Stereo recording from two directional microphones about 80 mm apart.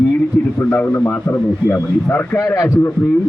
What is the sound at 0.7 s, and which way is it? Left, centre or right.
A man's voice, left.